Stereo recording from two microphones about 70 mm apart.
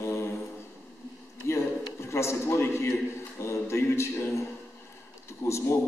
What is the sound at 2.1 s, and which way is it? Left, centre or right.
A man's voice, left.